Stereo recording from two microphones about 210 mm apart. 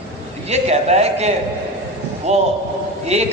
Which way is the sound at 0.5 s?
30° right (ahead or behind).